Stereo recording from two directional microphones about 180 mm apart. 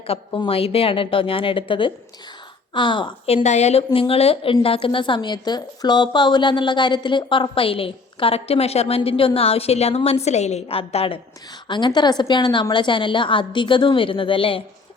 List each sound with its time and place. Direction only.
0.3 s a woman's voice: 25° left (ahead or behind)